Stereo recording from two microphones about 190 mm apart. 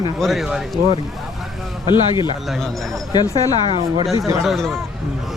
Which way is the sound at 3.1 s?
20° left (ahead or behind).